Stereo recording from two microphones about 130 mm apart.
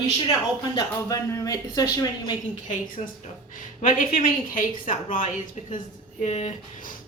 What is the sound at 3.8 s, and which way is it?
A woman's voice, 90° left.